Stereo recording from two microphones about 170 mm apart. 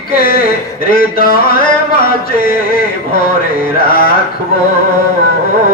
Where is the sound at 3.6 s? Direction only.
60° left (ahead or behind).